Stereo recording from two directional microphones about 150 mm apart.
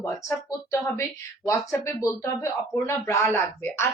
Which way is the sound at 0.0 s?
20° left (ahead or behind).